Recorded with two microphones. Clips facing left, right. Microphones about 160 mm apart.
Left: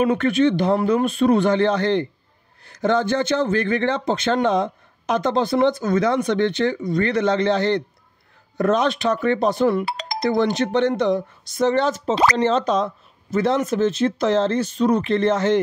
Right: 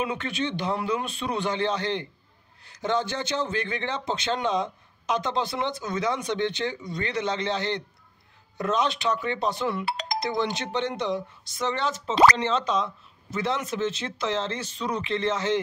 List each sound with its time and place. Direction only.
0.0 s speech: 50° left (ahead or behind)